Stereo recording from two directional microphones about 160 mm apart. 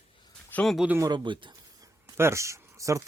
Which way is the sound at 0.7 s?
5° right (ahead or behind).